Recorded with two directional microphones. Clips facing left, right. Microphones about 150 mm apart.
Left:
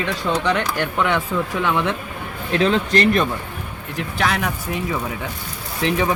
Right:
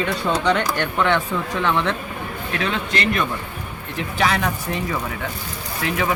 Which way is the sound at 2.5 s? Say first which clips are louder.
Left 7 dB; 35° left (ahead or behind).